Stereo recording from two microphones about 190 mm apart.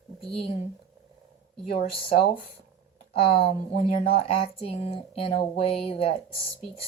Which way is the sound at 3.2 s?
30° left (ahead or behind).